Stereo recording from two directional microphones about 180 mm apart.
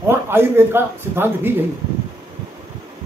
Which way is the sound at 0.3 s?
15° right (ahead or behind).